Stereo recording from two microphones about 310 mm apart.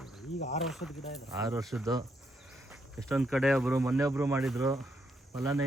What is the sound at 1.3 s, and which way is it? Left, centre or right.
Speech, centre.